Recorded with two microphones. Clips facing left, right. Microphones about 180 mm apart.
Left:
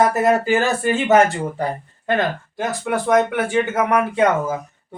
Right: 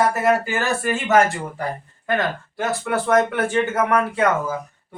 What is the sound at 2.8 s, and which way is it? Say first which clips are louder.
Speech: left 2 dB; 15° left (ahead or behind).